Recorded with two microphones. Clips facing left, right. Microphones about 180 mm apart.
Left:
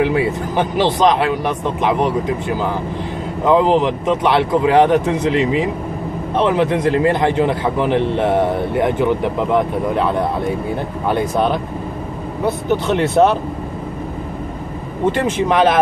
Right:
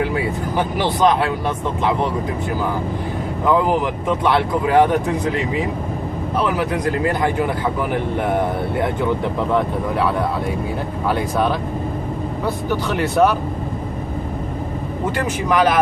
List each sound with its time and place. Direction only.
0.0 s speech: 20° left (ahead or behind)
3.4 s speech: 20° left (ahead or behind)
11.1 s speech: 20° left (ahead or behind)
15.0 s speech: 25° left (ahead or behind)